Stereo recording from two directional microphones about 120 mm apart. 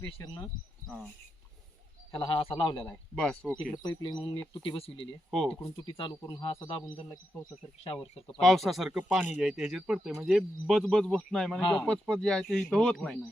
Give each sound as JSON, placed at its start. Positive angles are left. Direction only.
{"t": 0.0, "sound": "speech", "side_deg": 40}
{"t": 2.1, "sound": "speech", "side_deg": 45}
{"t": 3.2, "sound": "speech", "side_deg": 5}
{"t": 3.8, "sound": "speech", "side_deg": 35}
{"t": 5.3, "sound": "speech", "side_deg": 5}
{"t": 5.8, "sound": "speech", "side_deg": 40}
{"t": 8.4, "sound": "speech", "side_deg": 0}